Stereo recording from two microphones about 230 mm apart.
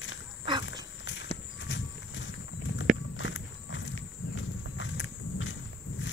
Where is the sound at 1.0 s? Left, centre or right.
Left.